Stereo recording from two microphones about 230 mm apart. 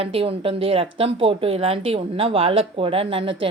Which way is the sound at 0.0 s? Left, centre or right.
Right.